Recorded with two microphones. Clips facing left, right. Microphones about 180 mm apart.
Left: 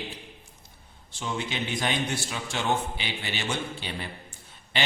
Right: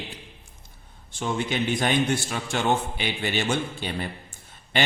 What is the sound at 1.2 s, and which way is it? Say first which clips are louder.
Mantra: right 5 dB; 50° right (ahead or behind).